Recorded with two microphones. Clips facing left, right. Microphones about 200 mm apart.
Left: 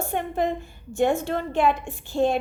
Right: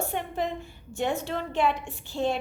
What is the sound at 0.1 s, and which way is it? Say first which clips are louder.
A woman's voice: left 5 dB; 50° left (ahead or behind).